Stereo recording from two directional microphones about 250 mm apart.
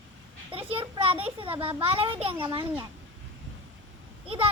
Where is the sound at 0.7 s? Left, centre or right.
Right.